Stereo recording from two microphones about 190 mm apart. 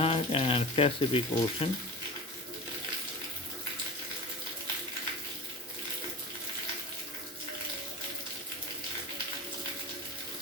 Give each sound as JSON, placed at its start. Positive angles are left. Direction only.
{"t": 0.0, "sound": "speech", "side_deg": 30}